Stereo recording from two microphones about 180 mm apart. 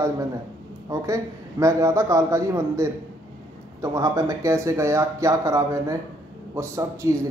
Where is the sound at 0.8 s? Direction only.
20° right (ahead or behind).